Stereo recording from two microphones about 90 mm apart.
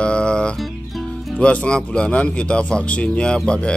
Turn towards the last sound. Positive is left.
turn(degrees=10)  # may be behind; listen again after turning